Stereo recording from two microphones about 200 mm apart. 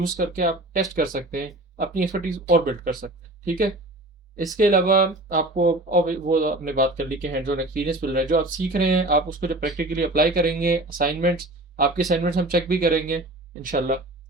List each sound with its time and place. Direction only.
0.3 s speech: 45° right (ahead or behind)